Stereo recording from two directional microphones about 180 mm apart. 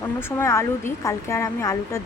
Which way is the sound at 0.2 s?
15° left (ahead or behind).